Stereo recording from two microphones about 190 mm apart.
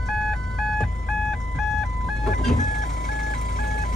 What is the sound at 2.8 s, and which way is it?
Vehicle, 55° left (ahead or behind).